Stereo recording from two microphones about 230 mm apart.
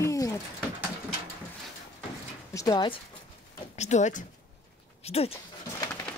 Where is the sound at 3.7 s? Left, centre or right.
Left.